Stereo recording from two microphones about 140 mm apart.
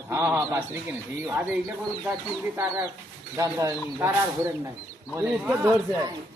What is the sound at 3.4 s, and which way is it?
Speech, 20° right (ahead or behind).